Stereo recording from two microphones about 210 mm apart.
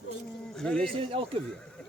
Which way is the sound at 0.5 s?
5° left (ahead or behind).